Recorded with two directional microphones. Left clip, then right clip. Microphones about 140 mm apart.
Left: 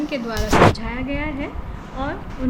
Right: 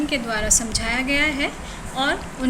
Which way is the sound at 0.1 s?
55° left (ahead or behind).